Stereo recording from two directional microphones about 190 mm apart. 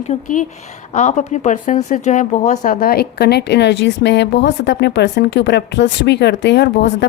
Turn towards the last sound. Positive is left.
turn(degrees=65)  # may be behind; listen again after turning